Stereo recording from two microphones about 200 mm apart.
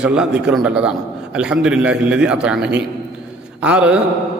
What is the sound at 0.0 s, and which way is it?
A man's voice, 5° right (ahead or behind).